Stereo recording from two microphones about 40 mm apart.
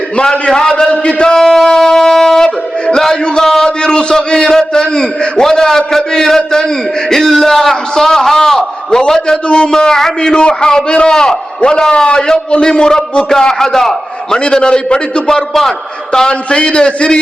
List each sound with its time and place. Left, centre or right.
0.2 s a man's voice: left
3.0 s a sound: centre
3.8 s a man's voice: left
10.3 s a man's voice: left
13.6 s a man's voice: centre
14.3 s a man's voice: left